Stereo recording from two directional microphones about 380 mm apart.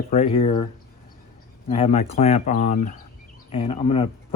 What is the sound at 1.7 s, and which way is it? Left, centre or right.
Speech, centre.